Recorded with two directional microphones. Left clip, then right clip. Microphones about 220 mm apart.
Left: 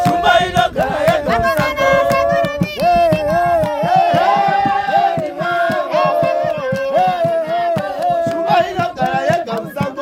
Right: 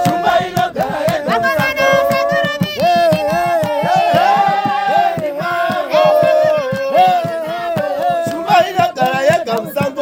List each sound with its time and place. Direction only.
0.0 s chant: 20° right (ahead or behind)
1.3 s music: 30° right (ahead or behind)
5.9 s music: 45° right (ahead or behind)
8.4 s music: 50° right (ahead or behind)